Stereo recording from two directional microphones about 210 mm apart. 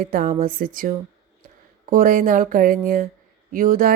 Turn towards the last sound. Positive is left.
turn(degrees=-40)  # may be behind; listen again after turning